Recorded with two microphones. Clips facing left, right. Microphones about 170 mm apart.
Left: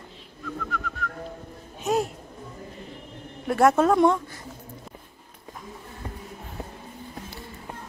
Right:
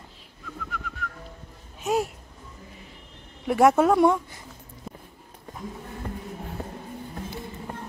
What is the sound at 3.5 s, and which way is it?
Speech, 10° right (ahead or behind).